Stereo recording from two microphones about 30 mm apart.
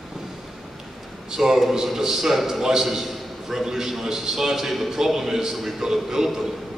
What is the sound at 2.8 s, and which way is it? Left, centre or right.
A man's voice, centre.